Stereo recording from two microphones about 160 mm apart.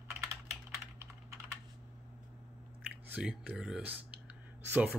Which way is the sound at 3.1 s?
10° right (ahead or behind).